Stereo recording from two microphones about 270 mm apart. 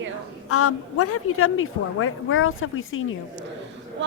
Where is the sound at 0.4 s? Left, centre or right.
Left.